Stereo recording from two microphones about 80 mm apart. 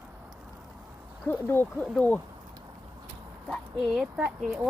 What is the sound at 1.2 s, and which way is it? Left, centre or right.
Speech, left.